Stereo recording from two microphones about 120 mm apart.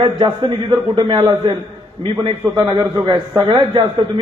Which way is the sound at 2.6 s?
40° right (ahead or behind).